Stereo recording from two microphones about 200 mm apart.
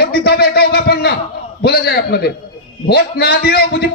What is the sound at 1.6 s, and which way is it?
A man's voice, 55° left (ahead or behind).